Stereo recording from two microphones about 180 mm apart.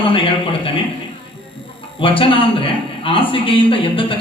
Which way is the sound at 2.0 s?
30° left (ahead or behind).